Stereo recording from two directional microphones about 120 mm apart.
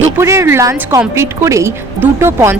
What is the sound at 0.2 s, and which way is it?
A woman's voice, 20° right (ahead or behind).